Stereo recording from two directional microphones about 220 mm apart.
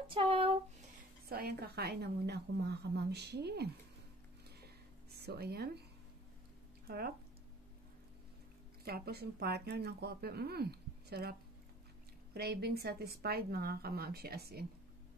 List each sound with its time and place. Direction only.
0.0 s a sound: 25° right (ahead or behind)
1.3 s speech: 45° right (ahead or behind)
5.1 s speech: 45° right (ahead or behind)
6.9 s speech: 45° right (ahead or behind)
8.8 s speech: 45° right (ahead or behind)
12.4 s speech: 45° right (ahead or behind)